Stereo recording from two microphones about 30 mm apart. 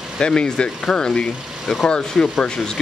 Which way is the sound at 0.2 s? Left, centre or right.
Left.